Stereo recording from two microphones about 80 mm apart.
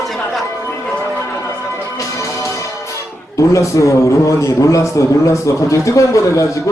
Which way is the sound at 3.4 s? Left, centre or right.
Left.